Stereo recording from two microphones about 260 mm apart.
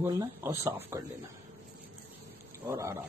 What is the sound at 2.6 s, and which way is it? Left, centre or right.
Speech, centre.